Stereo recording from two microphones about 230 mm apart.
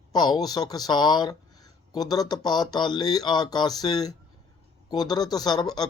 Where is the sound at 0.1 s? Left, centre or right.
Centre.